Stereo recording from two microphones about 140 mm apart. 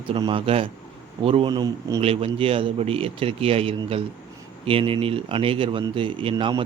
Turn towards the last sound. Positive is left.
turn(degrees=-35)  # may be behind; listen again after turning